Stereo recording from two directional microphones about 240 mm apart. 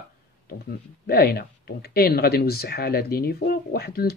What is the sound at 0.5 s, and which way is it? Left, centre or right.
Speech, left.